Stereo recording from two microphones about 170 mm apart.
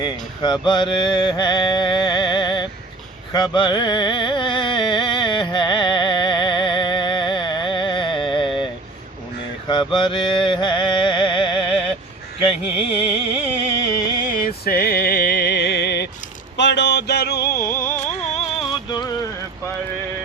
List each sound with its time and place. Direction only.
0.0 s mantra: 25° left (ahead or behind)
3.3 s carnatic music: 25° left (ahead or behind)
9.6 s mantra: 25° left (ahead or behind)
13.4 s music: 20° left (ahead or behind)
14.3 s music: 55° left (ahead or behind); by 16.0 s 80° left
16.6 s a sound: 90° left; by 17.5 s 70° left (ahead or behind)
17.6 s music: 55° left (ahead or behind)
18.7 s a sound: 25° left (ahead or behind)